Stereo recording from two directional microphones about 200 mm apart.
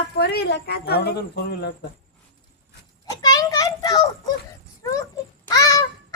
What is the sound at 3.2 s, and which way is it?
A child's voice, 20° left (ahead or behind).